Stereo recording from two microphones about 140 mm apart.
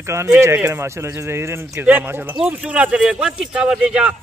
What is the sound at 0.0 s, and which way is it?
Speech, 20° right (ahead or behind).